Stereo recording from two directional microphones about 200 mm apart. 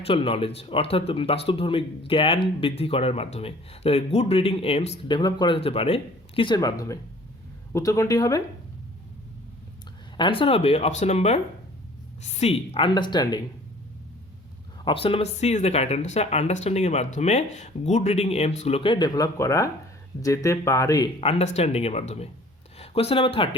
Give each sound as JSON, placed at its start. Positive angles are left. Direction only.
{"t": 0.0, "sound": "speech", "side_deg": 25}
{"t": 10.2, "sound": "speech", "side_deg": 25}
{"t": 14.8, "sound": "speech", "side_deg": 30}
{"t": 21.2, "sound": "speech", "side_deg": 30}